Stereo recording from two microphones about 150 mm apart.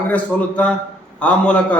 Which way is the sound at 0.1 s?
10° left (ahead or behind).